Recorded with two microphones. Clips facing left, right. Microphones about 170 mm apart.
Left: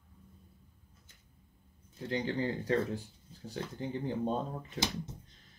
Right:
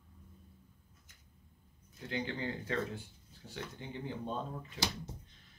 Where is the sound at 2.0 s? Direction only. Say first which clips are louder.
Left 5 dB; 35° left (ahead or behind).